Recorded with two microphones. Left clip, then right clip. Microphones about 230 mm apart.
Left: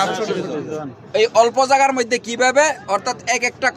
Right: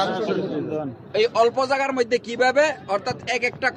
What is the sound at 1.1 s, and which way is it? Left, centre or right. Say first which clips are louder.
A man's voice: left 5 dB; left.